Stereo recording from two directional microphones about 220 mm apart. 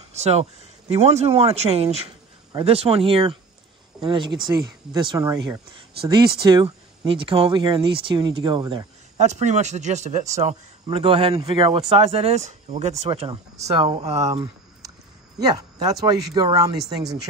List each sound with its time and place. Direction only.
0.1 s speech: 30° right (ahead or behind)
9.2 s speech: 30° right (ahead or behind)
15.4 s speech: 15° right (ahead or behind)